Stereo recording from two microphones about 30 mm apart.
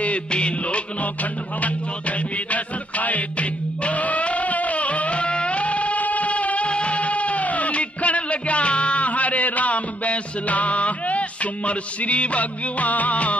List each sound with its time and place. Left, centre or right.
0.3 s music: left